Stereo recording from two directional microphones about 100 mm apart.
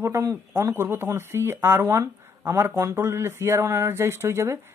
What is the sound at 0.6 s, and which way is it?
Speech, 30° right (ahead or behind).